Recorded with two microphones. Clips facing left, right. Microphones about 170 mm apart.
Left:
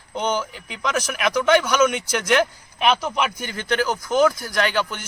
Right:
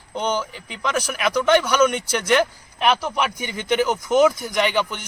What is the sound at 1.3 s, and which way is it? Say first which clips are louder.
Speech: even; 5° left (ahead or behind).